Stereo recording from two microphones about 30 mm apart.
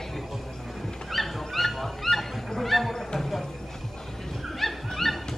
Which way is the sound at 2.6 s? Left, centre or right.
Centre.